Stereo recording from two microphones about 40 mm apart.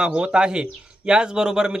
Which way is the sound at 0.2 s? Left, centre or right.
Right.